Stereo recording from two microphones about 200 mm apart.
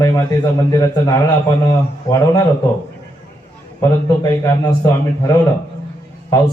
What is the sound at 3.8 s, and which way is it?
A man's voice, 15° left (ahead or behind).